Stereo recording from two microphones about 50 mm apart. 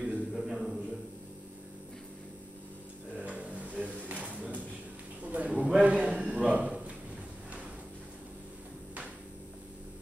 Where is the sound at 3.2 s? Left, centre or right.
Right.